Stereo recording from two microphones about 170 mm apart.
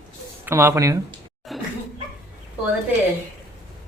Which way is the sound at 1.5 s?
Centre (ahead or behind).